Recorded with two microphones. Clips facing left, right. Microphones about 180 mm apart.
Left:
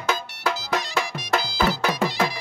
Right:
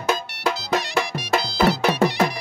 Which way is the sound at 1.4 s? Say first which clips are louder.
Right 6 dB; 70° right (ahead or behind).